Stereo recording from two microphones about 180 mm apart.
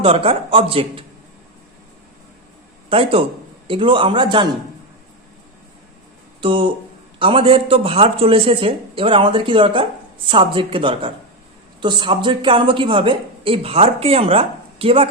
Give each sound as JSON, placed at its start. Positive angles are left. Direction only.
{"t": 0.0, "sound": "a man's voice", "side_deg": -30}
{"t": 2.9, "sound": "a man's voice", "side_deg": -30}
{"t": 6.4, "sound": "a man's voice", "side_deg": -30}